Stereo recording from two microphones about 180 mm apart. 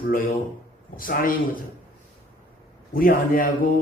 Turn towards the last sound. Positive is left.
turn(degrees=50)  # may be behind; listen again after turning